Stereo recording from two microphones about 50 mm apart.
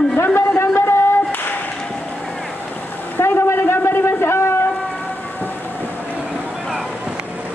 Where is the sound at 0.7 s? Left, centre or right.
Left.